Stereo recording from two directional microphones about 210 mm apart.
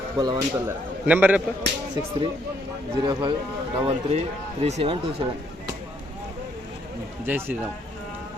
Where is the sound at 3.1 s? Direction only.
20° right (ahead or behind).